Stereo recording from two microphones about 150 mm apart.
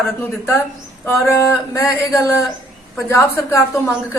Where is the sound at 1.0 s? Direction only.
20° left (ahead or behind).